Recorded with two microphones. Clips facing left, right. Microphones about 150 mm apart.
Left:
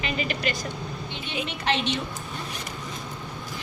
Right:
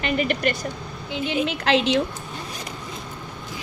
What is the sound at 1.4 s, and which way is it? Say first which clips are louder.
Speech: right 4 dB; 90° right.